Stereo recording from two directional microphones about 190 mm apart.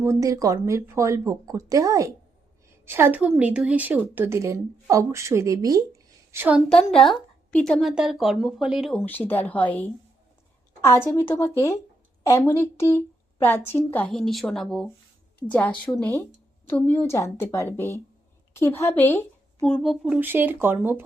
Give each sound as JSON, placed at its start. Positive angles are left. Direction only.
{"t": 0.0, "sound": "a woman's voice", "side_deg": -15}
{"t": 6.7, "sound": "a woman's voice", "side_deg": 5}
{"t": 9.0, "sound": "a woman's voice", "side_deg": 10}